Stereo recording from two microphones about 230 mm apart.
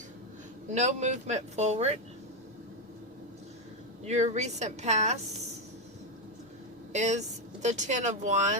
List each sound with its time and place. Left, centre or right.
0.7 s speech: right
4.0 s speech: right
6.9 s speech: right